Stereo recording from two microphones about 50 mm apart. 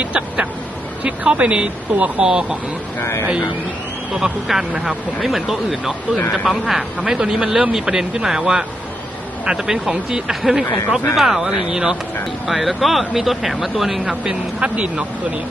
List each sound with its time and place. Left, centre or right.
0.0 s speech: right
3.0 s speech: left
4.1 s speech: centre
12.5 s speech: centre
14.6 s speech: right